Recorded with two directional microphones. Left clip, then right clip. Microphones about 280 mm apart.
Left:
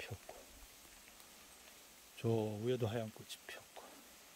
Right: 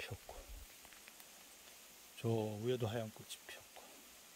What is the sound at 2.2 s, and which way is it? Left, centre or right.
Speech, centre.